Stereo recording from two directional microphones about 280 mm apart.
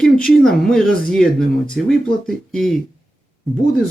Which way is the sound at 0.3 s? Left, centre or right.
Centre.